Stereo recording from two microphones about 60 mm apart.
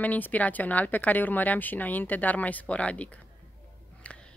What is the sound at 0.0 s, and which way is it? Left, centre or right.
Speech, left.